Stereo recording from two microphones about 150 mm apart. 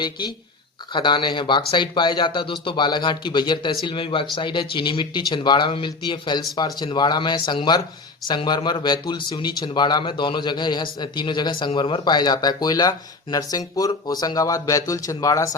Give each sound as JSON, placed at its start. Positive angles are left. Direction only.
{"t": 0.0, "sound": "speech", "side_deg": 30}